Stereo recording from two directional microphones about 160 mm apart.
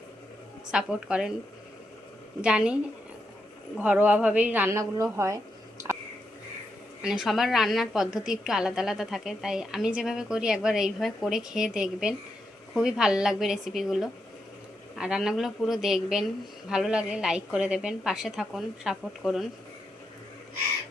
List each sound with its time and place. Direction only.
0.7 s a woman's voice: 5° right (ahead or behind)
2.4 s a woman's voice: 5° right (ahead or behind)
3.8 s a woman's voice: 10° right (ahead or behind)
7.0 s a woman's voice: centre (ahead or behind)